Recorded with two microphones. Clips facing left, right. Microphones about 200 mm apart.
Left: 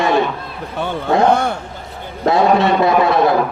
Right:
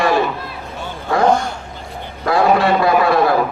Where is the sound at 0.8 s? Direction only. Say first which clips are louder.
Left 8 dB; 60° left (ahead or behind).